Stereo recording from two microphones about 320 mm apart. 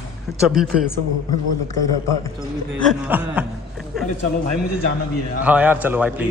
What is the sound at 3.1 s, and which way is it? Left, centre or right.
A man's voice, centre.